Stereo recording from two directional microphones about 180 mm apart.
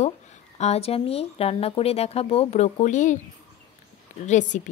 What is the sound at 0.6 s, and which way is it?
Speech, 35° left (ahead or behind).